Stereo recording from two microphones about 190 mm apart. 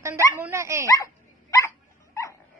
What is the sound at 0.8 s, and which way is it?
Dog, 15° left (ahead or behind).